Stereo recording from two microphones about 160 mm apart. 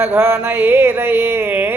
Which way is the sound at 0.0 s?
15° right (ahead or behind).